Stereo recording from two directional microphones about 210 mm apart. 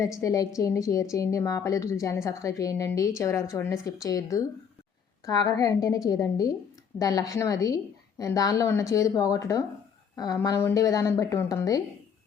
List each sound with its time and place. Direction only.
0.2 s a woman's voice: 15° left (ahead or behind)